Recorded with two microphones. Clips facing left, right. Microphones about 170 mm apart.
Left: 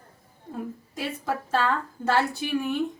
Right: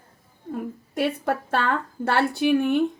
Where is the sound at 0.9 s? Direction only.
60° right (ahead or behind).